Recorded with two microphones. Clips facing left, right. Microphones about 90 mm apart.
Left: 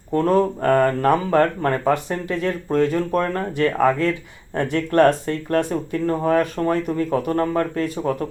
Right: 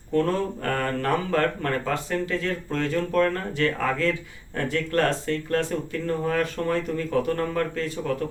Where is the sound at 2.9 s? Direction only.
35° left (ahead or behind).